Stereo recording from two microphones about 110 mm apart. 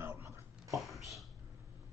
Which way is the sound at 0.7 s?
Centre (ahead or behind).